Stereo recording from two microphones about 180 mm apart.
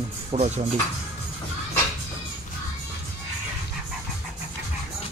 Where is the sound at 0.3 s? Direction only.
40° right (ahead or behind).